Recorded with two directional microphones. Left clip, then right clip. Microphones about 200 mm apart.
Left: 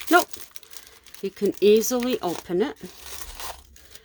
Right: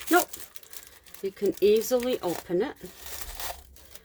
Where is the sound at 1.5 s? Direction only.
45° left (ahead or behind).